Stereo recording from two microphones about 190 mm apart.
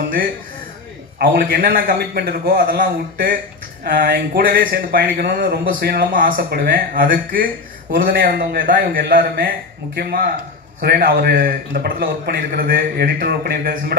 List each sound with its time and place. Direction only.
1.2 s speech: 50° right (ahead or behind)